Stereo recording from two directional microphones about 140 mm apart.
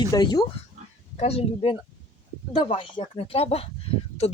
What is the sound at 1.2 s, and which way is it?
Speech, 45° left (ahead or behind).